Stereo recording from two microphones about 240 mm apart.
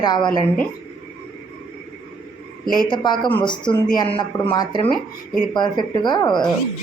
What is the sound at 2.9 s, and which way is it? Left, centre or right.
A woman's voice, centre.